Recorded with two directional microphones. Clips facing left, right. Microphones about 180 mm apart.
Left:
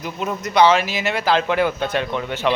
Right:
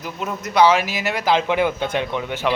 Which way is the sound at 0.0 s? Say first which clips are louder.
Left 2 dB; centre (ahead or behind).